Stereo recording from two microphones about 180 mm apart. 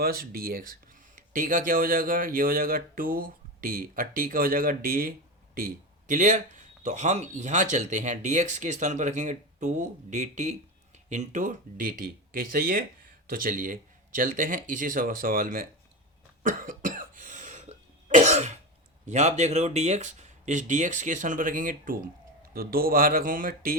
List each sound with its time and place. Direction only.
0.0 s speech: 55° right (ahead or behind)
16.4 s cough: 50° right (ahead or behind)
19.0 s speech: 40° right (ahead or behind)